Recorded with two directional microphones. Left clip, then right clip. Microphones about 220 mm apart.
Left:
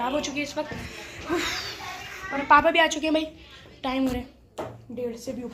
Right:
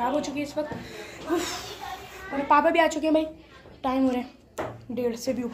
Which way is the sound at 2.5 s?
10° right (ahead or behind).